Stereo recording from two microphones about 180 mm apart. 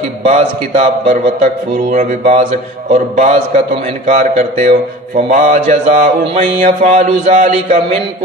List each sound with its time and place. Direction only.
0.2 s a man's voice: 40° right (ahead or behind)